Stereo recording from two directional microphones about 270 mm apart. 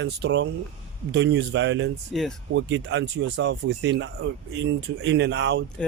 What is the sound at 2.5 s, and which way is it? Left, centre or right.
Speech, right.